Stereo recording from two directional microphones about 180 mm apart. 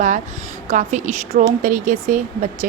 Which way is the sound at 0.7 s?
40° right (ahead or behind).